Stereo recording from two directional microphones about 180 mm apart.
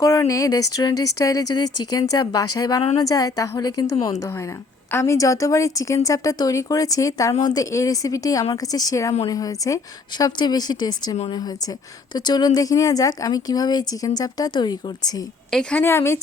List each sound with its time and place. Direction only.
0.0 s a woman's voice: 20° left (ahead or behind)
3.9 s a woman's voice: 35° left (ahead or behind)
4.2 s a woman's voice: 15° left (ahead or behind)
15.4 s a woman's voice: centre (ahead or behind)
15.8 s speech: 15° left (ahead or behind)